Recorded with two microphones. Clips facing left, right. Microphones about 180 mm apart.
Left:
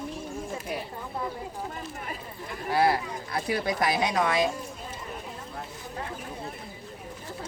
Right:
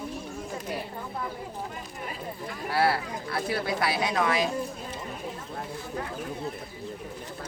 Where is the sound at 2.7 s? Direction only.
20° left (ahead or behind).